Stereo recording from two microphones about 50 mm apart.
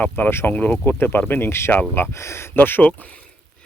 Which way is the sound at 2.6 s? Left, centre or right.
Left.